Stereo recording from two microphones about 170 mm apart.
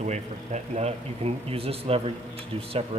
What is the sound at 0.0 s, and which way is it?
Speech, 40° right (ahead or behind).